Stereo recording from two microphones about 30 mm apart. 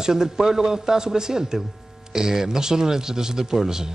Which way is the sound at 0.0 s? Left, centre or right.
Right.